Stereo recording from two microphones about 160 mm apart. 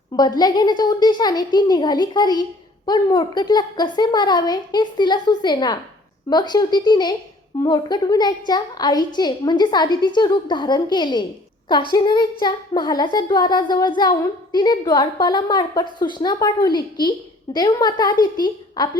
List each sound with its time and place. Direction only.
0.2 s a woman's voice: 25° left (ahead or behind)